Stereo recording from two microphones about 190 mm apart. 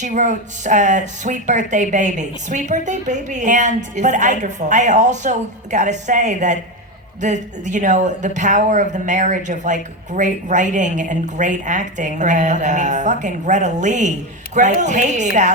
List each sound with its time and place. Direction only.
0.0 s speech: 40° right (ahead or behind)